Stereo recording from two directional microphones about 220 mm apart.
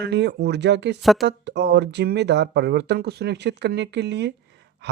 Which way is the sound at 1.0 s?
Centre (ahead or behind).